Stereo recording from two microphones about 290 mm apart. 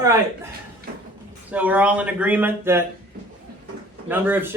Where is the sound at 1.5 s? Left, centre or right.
Centre.